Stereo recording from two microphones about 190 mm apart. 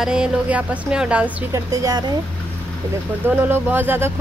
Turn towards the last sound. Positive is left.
turn(degrees=-10)  # may be behind; listen again after turning